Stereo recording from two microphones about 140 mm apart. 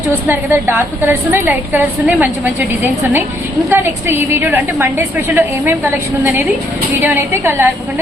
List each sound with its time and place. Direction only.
0.3 s a woman's voice: 15° right (ahead or behind)